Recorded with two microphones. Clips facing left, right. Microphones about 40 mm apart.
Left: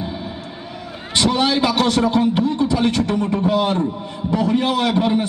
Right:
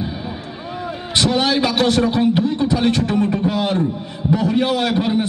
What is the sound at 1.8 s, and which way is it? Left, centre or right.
A man's voice, right.